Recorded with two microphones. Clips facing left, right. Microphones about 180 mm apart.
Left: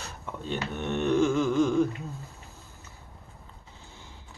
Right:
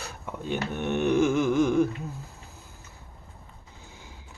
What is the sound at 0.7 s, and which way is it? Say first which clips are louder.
Speech: right 1 dB; 10° right (ahead or behind).